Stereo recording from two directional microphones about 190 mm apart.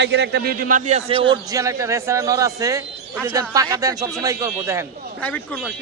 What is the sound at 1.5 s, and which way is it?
Speech, 15° right (ahead or behind).